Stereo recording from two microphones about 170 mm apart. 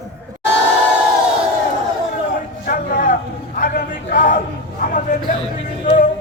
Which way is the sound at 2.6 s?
55° left (ahead or behind).